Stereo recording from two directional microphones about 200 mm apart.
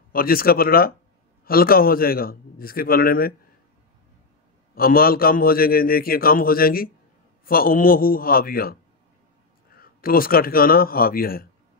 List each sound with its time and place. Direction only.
0.1 s a man's voice: 45° left (ahead or behind)
4.7 s a man's voice: 45° left (ahead or behind)
9.8 s a man's voice: 45° left (ahead or behind)